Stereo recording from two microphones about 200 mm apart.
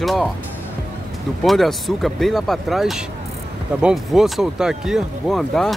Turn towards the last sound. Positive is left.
turn(degrees=0)  # may be behind; listen again after turning